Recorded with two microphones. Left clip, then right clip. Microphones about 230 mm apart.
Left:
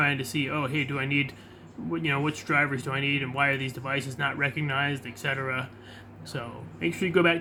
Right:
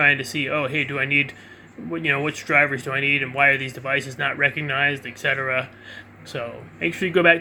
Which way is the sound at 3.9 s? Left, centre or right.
Left.